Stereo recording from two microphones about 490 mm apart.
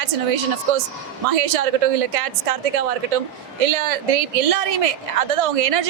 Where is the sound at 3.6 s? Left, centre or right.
Right.